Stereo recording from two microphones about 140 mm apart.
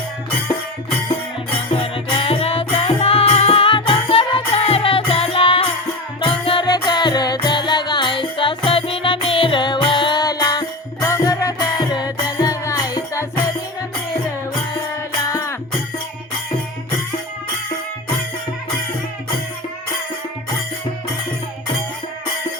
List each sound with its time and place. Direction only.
1.8 s music: 45° left (ahead or behind); by 13.2 s 25° left (ahead or behind)
15.2 s music: 25° left (ahead or behind)